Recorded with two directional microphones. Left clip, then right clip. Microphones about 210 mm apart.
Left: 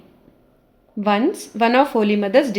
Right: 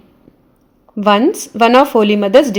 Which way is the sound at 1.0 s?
45° right (ahead or behind).